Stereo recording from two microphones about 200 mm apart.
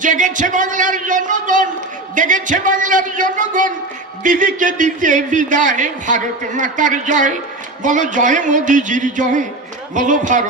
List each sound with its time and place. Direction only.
0.0 s a man's voice: 40° right (ahead or behind)